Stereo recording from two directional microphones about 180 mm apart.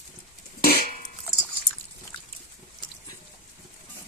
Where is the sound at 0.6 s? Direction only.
60° left (ahead or behind).